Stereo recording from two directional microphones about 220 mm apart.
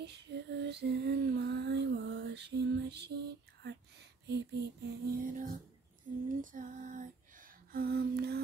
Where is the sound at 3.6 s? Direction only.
50° right (ahead or behind).